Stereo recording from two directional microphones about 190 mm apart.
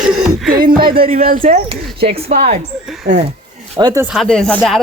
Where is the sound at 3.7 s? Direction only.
15° right (ahead or behind).